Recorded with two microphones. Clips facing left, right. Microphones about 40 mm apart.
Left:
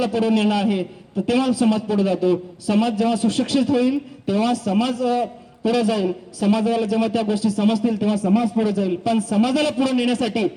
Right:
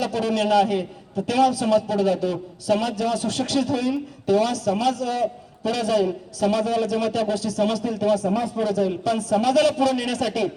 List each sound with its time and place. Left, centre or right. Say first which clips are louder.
0.0 s a man's voice: left 4 dB; centre